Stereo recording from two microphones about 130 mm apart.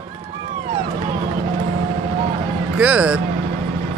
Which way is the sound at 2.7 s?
10° right (ahead or behind).